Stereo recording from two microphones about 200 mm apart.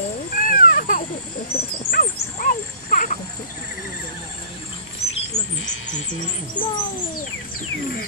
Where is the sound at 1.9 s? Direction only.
45° left (ahead or behind).